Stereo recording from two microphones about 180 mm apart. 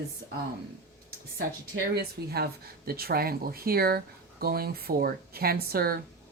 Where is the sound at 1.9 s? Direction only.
60° right (ahead or behind).